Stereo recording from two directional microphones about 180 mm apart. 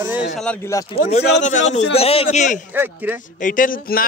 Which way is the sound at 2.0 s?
35° left (ahead or behind).